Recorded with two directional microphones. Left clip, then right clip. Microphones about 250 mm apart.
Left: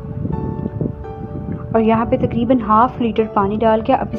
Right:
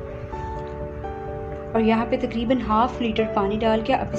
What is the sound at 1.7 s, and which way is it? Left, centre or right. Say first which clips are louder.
A woman's voice: left 6 dB; left.